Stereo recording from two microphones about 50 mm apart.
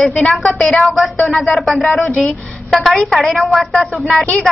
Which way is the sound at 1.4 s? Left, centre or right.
Centre.